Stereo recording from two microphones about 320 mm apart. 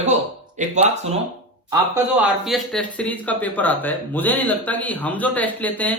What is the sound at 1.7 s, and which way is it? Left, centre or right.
A man's voice, centre.